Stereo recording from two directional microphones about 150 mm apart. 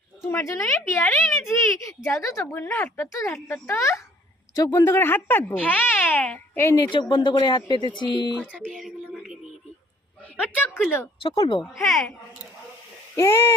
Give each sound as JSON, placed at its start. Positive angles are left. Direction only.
{"t": 0.3, "sound": "a woman's voice", "side_deg": 20}
{"t": 2.4, "sound": "a child's voice", "side_deg": 10}
{"t": 8.4, "sound": "a child's voice", "side_deg": 10}
{"t": 8.8, "sound": "a sound", "side_deg": -5}
{"t": 10.5, "sound": "speech", "side_deg": 10}
{"t": 11.2, "sound": "speech", "side_deg": 35}
{"t": 11.9, "sound": "speech", "side_deg": 0}
{"t": 13.1, "sound": "a child's voice", "side_deg": 15}